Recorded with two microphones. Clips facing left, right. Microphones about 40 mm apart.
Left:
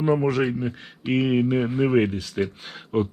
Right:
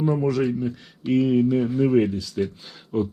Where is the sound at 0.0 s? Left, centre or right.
Left.